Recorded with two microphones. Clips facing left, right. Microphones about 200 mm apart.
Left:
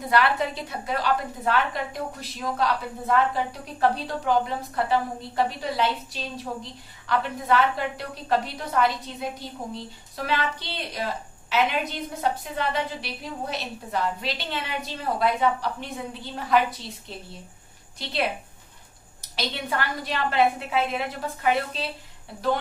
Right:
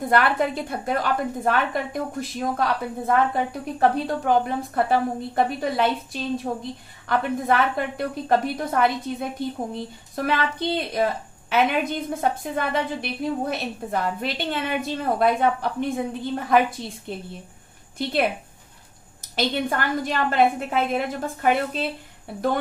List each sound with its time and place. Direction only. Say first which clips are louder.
0.1 s a woman's voice: right 2 dB; 50° right (ahead or behind)
19.3 s a woman's voice: right 5 dB; 50° right (ahead or behind)